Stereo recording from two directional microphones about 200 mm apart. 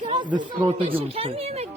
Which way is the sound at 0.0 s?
20° right (ahead or behind).